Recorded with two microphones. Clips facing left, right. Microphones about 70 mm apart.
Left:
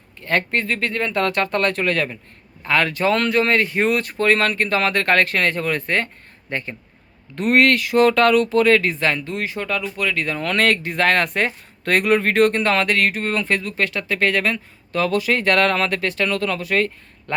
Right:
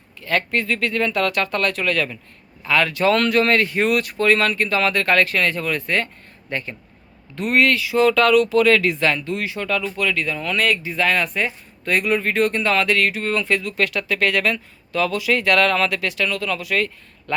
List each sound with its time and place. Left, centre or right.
0.2 s speech: left
7.3 s speech: left
10.2 s speech: left